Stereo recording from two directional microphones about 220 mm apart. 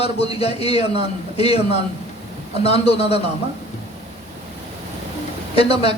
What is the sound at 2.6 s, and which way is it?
Speech, 25° left (ahead or behind).